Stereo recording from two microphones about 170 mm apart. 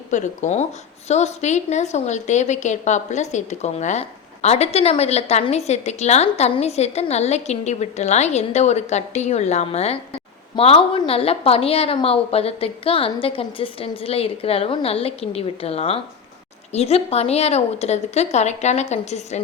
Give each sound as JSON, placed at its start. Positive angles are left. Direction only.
{"t": 0.1, "sound": "a woman's voice", "side_deg": 45}